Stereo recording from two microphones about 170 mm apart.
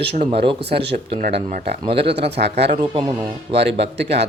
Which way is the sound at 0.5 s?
75° right (ahead or behind).